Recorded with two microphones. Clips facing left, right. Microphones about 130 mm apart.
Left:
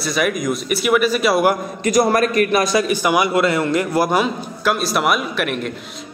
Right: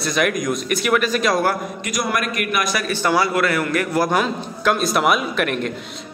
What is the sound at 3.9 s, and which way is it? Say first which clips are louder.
A man's voice: left 2 dB; 10° left (ahead or behind).